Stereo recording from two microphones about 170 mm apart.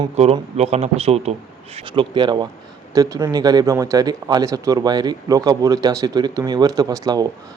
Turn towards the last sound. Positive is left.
turn(degrees=-20)  # may be behind; listen again after turning